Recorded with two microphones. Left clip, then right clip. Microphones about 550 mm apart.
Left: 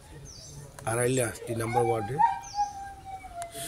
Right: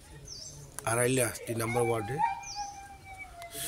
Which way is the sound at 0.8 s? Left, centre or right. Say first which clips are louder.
Left 1 dB; right.